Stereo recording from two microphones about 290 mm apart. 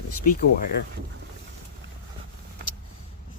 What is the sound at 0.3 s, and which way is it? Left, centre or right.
Speech, left.